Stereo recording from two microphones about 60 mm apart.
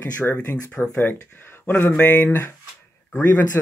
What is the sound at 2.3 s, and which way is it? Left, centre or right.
Speech, left.